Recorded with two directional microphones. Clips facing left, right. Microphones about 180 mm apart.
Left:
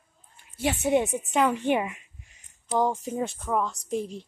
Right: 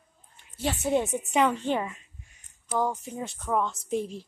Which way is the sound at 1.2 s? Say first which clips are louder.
Even; centre (ahead or behind).